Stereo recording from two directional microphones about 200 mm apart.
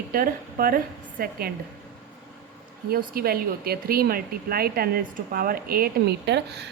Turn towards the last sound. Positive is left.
turn(degrees=-55)  # may be behind; listen again after turning